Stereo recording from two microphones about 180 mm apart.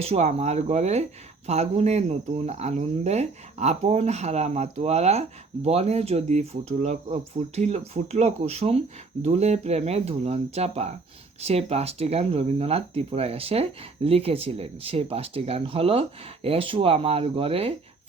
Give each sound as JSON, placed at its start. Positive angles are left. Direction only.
{"t": 0.0, "sound": "speech", "side_deg": -35}